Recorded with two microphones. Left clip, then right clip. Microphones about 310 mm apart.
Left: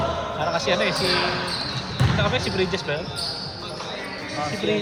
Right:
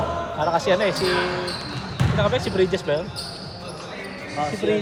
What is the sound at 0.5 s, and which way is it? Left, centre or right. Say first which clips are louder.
Speech: right 2 dB; right.